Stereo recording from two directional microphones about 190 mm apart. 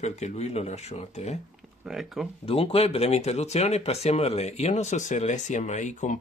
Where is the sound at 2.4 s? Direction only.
30° left (ahead or behind).